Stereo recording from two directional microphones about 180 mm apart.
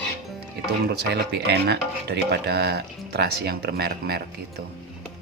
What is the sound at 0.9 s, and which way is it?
Speech, 65° right (ahead or behind).